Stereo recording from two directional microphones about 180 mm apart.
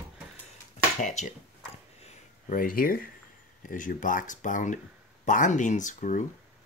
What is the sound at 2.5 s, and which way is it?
Speech, 50° left (ahead or behind).